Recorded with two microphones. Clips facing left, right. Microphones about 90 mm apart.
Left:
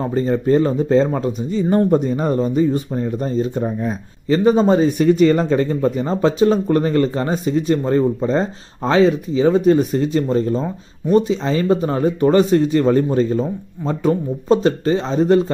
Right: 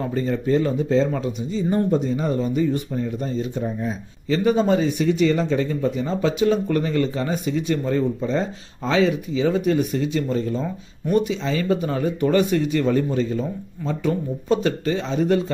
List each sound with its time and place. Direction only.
0.0 s speech: 35° left (ahead or behind)
1.5 s speech: 60° left (ahead or behind); by 15.5 s 35° left (ahead or behind)